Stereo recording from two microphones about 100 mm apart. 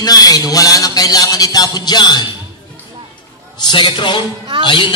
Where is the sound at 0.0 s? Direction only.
40° left (ahead or behind).